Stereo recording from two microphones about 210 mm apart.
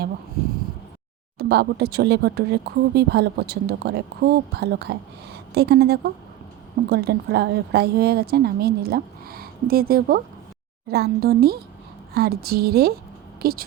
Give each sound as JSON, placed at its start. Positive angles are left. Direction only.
{"t": 1.4, "sound": "speech", "side_deg": -50}